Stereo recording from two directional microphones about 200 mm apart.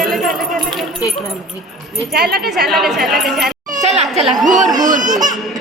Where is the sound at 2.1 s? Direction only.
55° right (ahead or behind).